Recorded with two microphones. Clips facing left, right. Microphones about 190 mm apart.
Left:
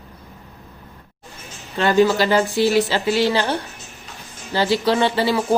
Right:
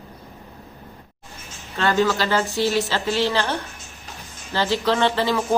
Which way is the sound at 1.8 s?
15° left (ahead or behind).